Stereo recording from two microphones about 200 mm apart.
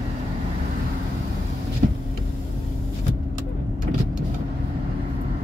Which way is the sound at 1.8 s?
40° right (ahead or behind).